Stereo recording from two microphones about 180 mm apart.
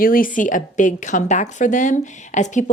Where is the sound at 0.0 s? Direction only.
50° left (ahead or behind).